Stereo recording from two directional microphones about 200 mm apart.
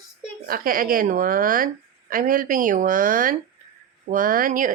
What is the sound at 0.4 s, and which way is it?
A woman's voice, 45° right (ahead or behind).